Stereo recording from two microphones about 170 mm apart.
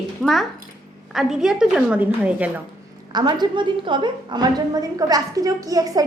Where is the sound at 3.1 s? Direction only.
25° right (ahead or behind).